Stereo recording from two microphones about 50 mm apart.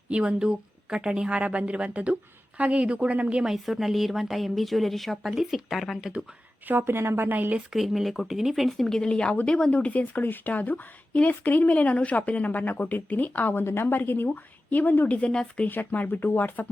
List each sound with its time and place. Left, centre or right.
0.1 s a woman's voice: right
3.4 s speech: centre
6.7 s a woman's voice: right
7.7 s speech: centre
8.9 s a woman's voice: centre; by 13.8 s left
13.8 s a woman's voice: left
15.1 s speech: left
15.6 s a woman's voice: left